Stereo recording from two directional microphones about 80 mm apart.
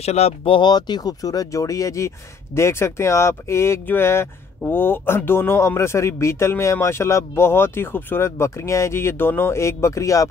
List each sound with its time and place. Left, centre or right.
0.4 s speech: left